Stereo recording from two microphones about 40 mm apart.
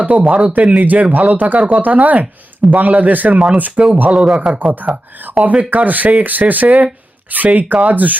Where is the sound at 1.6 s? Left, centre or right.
Right.